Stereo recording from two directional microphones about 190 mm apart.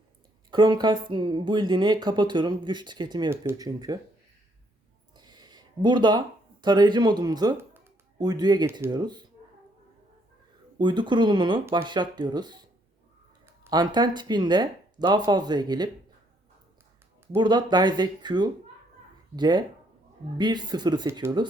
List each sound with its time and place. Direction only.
0.5 s speech: 25° right (ahead or behind)
5.1 s speech: 20° right (ahead or behind)
10.8 s speech: 25° right (ahead or behind)
13.7 s speech: 20° right (ahead or behind)
17.3 s speech: 25° right (ahead or behind)